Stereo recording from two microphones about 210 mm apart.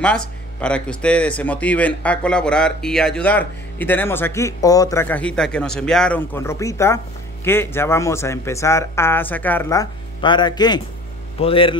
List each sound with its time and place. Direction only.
0.0 s a man's voice: 5° left (ahead or behind); by 11.7 s 25° left (ahead or behind)